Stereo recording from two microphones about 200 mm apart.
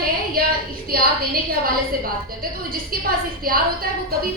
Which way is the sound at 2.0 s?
45° right (ahead or behind).